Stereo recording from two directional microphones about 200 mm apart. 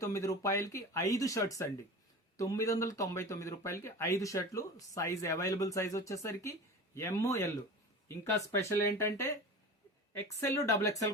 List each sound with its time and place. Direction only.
0.0 s speech: 15° left (ahead or behind)
10.5 s speech: 15° left (ahead or behind)